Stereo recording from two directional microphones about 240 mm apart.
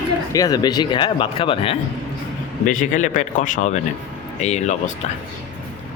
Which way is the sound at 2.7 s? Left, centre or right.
Left.